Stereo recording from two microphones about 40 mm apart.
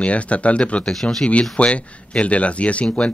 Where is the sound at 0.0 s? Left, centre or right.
Left.